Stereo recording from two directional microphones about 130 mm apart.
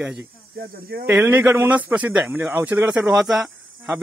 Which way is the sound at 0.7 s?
90° right.